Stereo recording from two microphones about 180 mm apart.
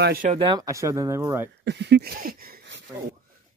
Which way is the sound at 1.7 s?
70° right (ahead or behind).